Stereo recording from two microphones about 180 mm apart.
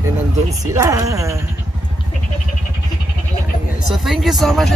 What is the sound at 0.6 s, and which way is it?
Speech, 15° right (ahead or behind).